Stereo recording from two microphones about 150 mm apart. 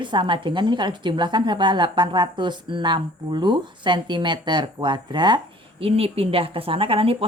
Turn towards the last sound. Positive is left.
turn(degrees=-40)  # may be behind; listen again after turning